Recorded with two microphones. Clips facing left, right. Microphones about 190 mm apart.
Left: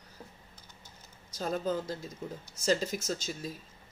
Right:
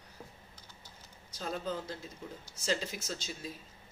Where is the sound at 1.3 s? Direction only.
45° left (ahead or behind).